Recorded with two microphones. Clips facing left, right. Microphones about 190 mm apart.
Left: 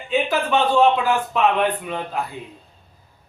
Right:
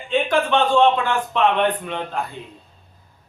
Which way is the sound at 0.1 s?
5° left (ahead or behind).